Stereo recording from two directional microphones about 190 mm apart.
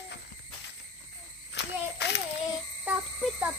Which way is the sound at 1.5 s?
65° left (ahead or behind).